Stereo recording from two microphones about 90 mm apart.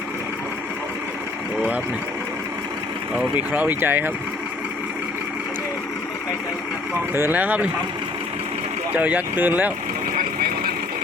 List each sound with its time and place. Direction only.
3.3 s speech: 20° right (ahead or behind)
7.1 s speech: 20° right (ahead or behind)
9.0 s speech: 15° right (ahead or behind)